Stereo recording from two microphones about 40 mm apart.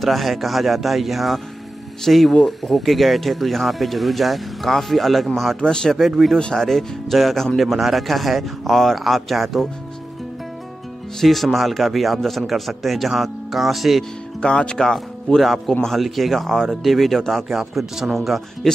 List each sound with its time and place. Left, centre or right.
0.0 s speech: centre
5.6 s speech: centre
11.1 s speech: centre
14.4 s speech: left
15.3 s speech: centre